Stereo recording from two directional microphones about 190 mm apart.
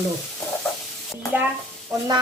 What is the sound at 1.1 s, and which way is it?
Speech, 10° right (ahead or behind).